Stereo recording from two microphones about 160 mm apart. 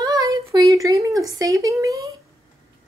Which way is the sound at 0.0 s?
20° right (ahead or behind).